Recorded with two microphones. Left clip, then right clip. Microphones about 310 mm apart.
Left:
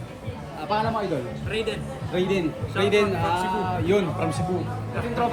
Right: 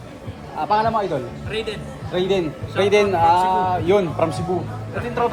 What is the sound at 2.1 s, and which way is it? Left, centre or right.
Speech, centre.